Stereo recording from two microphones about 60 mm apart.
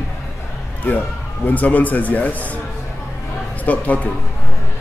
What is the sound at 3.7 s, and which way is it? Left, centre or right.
Speech, left.